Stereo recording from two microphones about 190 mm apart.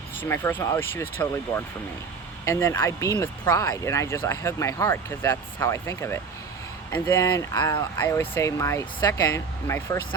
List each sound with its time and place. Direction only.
0.2 s speech: 10° left (ahead or behind)
7.9 s speech: 10° left (ahead or behind)